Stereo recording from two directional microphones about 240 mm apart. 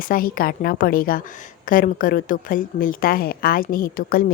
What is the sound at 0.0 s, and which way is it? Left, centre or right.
A woman's voice, left.